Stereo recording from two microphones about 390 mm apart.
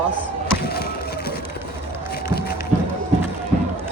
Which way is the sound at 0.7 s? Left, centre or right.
Left.